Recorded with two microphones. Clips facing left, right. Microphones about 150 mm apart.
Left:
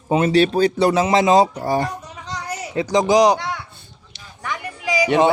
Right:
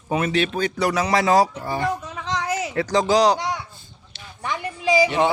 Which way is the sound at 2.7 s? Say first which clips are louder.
Left 4 dB; 15° left (ahead or behind).